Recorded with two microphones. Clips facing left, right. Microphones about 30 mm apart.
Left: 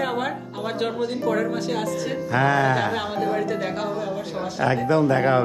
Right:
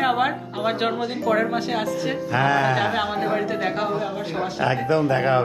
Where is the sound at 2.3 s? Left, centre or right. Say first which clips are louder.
Even; right.